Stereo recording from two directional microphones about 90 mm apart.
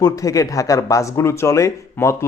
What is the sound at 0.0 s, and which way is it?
A man's voice, 40° left (ahead or behind).